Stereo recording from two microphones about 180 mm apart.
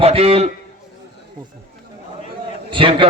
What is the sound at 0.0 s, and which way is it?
Speech, 35° right (ahead or behind).